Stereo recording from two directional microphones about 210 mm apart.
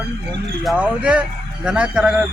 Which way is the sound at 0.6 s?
5° right (ahead or behind).